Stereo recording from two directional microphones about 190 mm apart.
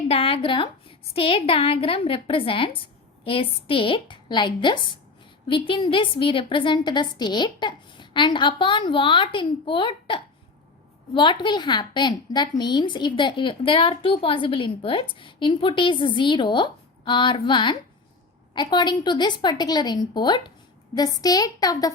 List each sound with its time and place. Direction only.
0.1 s a woman's voice: 30° left (ahead or behind)